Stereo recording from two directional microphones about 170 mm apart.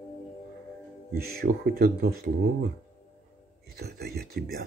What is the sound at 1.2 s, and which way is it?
Speech, 65° right (ahead or behind).